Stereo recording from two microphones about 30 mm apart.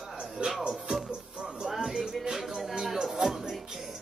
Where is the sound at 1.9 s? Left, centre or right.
Right.